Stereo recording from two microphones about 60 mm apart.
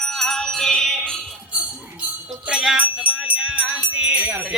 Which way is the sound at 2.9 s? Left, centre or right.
Centre.